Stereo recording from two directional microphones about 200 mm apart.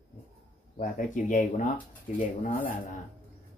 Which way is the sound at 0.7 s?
40° left (ahead or behind).